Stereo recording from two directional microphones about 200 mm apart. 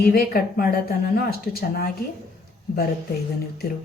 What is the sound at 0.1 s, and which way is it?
Speech, 50° left (ahead or behind).